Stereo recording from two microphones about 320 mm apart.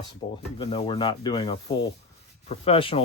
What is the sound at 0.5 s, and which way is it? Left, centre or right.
Speech, centre.